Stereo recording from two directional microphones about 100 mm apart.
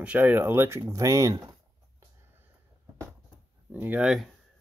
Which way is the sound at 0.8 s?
35° right (ahead or behind).